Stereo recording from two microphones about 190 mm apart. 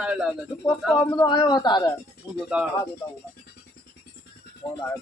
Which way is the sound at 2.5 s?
5° right (ahead or behind).